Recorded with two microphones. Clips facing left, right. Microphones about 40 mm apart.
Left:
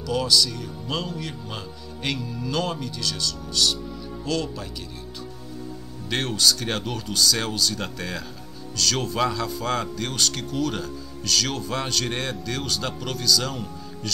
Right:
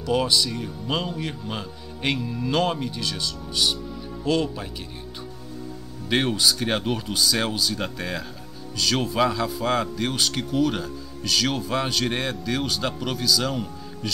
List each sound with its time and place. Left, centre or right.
0.0 s speech: right
6.0 s speech: centre